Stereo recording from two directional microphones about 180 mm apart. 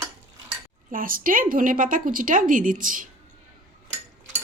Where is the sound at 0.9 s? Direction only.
50° right (ahead or behind).